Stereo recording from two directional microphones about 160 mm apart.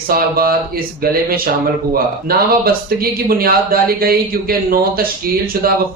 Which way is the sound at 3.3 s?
65° right (ahead or behind).